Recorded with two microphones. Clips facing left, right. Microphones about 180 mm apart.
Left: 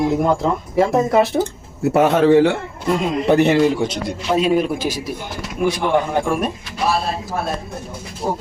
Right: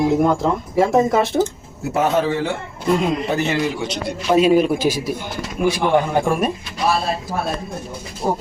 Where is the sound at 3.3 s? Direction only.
60° left (ahead or behind).